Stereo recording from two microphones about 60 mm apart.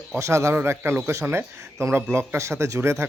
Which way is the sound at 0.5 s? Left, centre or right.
Right.